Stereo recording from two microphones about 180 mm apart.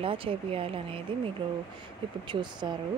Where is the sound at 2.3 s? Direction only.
25° right (ahead or behind).